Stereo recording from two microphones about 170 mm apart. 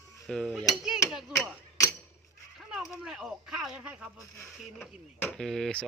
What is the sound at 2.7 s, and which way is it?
Speech, 5° right (ahead or behind).